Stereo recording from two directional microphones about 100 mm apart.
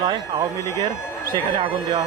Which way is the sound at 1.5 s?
60° right (ahead or behind).